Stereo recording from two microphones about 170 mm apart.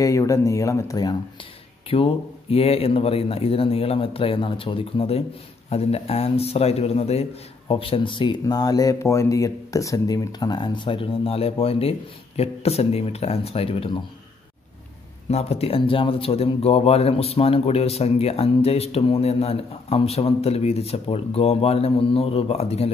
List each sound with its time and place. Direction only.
0.0 s speech: 20° left (ahead or behind)
1.9 s speech: 35° left (ahead or behind)
15.2 s speech: 40° left (ahead or behind)